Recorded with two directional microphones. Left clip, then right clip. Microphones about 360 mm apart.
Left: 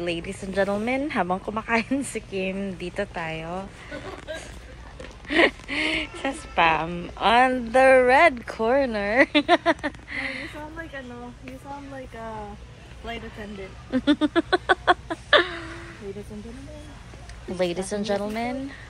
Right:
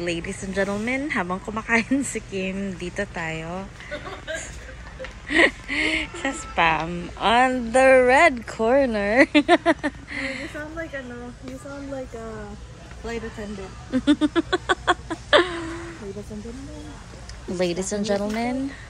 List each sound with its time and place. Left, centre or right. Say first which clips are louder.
0.0 s speech: right 1 dB; centre
5.3 s speech: right 2 dB; centre
13.9 s a sound: right 1 dB; centre
17.6 s a woman's voice: right 1 dB; centre